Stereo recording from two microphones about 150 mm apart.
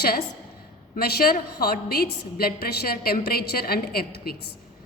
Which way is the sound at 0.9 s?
85° left.